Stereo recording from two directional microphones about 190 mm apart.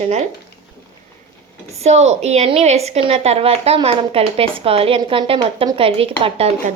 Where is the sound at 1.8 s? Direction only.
35° right (ahead or behind).